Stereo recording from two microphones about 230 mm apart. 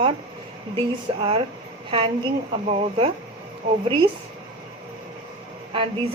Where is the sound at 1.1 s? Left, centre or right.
Right.